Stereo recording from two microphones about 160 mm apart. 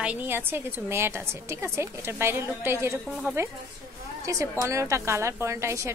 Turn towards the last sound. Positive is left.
turn(degrees=-20)  # may be behind; listen again after turning